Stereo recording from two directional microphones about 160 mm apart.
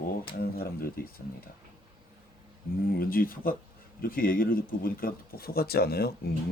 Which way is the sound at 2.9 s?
65° left (ahead or behind).